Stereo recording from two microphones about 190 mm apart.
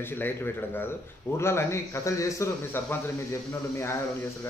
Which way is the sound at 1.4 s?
15° left (ahead or behind).